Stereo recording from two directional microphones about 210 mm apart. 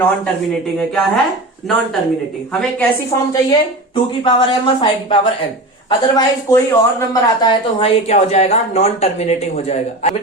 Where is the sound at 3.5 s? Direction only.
20° left (ahead or behind).